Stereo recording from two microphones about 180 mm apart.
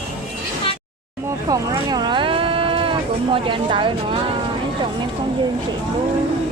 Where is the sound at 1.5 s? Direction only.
20° right (ahead or behind).